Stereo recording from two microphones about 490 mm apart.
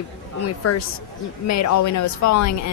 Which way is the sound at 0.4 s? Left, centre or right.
Left.